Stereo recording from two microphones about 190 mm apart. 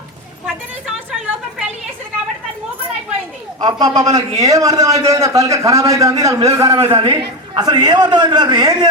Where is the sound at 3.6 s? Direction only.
20° right (ahead or behind).